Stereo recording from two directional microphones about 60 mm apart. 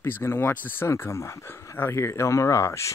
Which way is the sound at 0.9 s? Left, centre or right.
Left.